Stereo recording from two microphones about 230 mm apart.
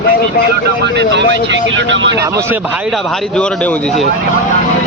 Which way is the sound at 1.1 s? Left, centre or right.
Right.